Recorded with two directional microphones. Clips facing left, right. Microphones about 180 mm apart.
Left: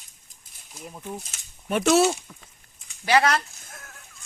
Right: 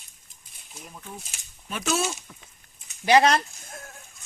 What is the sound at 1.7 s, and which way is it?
Speech, 65° left (ahead or behind).